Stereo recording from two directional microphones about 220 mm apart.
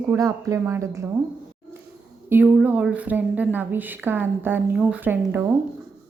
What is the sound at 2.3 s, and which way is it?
A woman's voice, 5° right (ahead or behind).